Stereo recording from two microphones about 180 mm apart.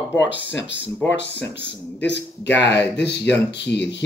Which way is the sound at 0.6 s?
85° left.